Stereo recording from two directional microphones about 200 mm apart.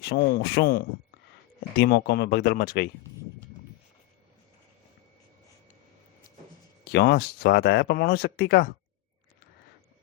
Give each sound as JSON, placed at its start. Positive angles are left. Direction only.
{"t": 0.0, "sound": "speech", "side_deg": 50}
{"t": 6.9, "sound": "speech", "side_deg": 55}